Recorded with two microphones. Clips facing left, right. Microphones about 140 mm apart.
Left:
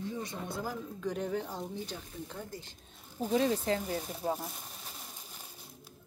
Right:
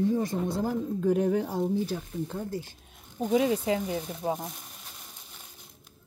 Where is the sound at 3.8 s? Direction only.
Centre (ahead or behind).